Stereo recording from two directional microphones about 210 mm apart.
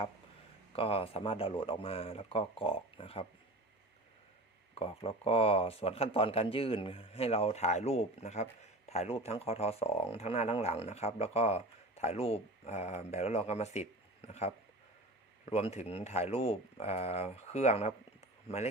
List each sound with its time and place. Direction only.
0.7 s speech: 25° left (ahead or behind)
4.7 s speech: 30° left (ahead or behind)